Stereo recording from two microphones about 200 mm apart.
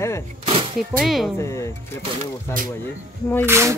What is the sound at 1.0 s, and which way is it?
Speech, centre (ahead or behind).